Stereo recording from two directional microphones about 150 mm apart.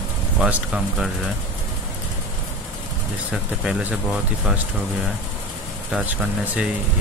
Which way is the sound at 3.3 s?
5° right (ahead or behind).